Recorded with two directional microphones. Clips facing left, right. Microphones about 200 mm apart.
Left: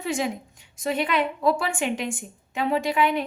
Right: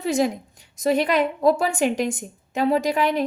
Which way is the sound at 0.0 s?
40° right (ahead or behind).